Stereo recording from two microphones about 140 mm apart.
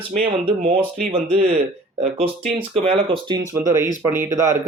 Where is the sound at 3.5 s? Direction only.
20° right (ahead or behind).